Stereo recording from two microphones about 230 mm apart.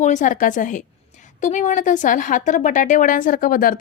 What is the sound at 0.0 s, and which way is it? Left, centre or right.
A woman's voice, left.